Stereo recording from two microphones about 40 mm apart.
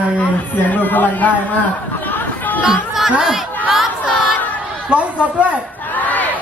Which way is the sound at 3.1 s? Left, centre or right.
Right.